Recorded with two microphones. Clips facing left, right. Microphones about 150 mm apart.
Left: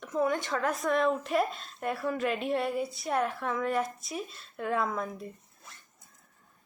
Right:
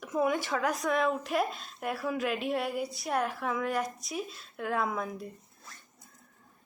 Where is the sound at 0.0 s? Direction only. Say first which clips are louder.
Even; 10° right (ahead or behind).